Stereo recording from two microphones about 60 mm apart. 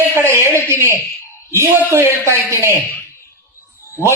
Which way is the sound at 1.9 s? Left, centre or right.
Right.